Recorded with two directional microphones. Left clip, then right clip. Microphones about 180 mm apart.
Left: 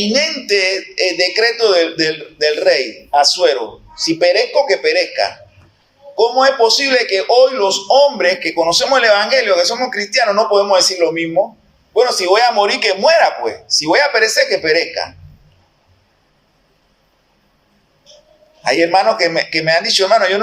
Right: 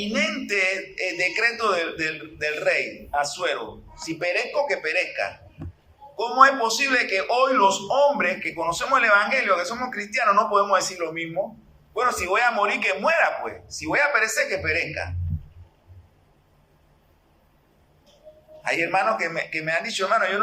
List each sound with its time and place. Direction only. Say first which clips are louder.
0.0 s speech: left 9 dB; 25° left (ahead or behind)
18.6 s speech: left 10 dB; 30° left (ahead or behind)